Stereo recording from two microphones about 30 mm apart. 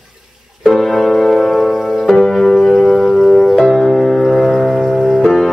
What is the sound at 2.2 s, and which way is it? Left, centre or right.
Music, centre.